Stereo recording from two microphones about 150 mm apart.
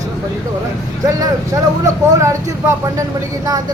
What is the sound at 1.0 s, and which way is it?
Speech, 20° right (ahead or behind).